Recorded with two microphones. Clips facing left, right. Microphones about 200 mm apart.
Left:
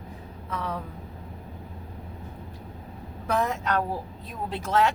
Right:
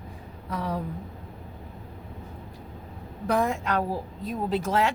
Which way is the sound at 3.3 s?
10° right (ahead or behind).